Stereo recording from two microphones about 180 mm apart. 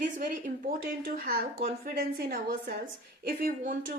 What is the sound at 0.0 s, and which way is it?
A woman's voice, 50° right (ahead or behind).